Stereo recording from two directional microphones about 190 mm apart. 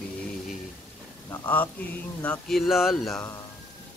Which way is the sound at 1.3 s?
10° left (ahead or behind).